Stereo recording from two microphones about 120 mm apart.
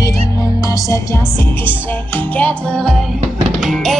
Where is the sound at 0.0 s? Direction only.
30° left (ahead or behind).